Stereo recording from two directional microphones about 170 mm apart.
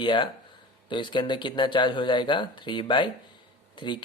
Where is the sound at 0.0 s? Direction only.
30° left (ahead or behind).